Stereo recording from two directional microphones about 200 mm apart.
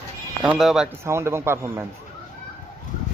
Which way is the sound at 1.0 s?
15° right (ahead or behind).